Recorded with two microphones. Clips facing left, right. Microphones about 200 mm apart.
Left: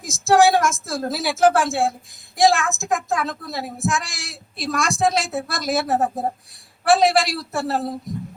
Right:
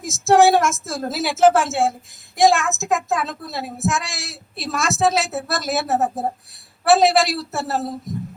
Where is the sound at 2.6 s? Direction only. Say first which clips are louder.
Right 2 dB; 20° right (ahead or behind).